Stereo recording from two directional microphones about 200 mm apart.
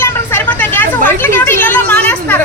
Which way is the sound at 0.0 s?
10° left (ahead or behind).